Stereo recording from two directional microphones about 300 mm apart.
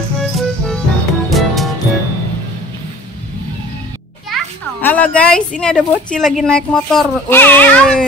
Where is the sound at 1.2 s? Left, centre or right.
Centre.